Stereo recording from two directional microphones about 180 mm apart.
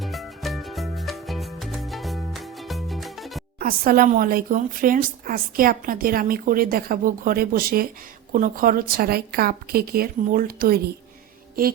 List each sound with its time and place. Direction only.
0.0 s music: centre (ahead or behind)
3.6 s a woman's voice: 55° right (ahead or behind)